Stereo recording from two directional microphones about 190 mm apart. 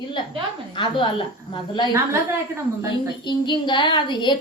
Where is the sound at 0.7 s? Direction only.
25° left (ahead or behind).